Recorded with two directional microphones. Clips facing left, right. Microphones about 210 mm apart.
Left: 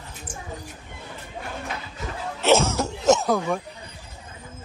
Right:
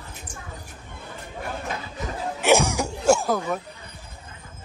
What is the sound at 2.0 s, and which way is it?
Cough, 15° right (ahead or behind).